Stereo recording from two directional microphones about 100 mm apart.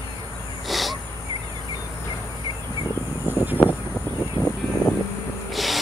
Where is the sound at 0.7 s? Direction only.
Centre (ahead or behind).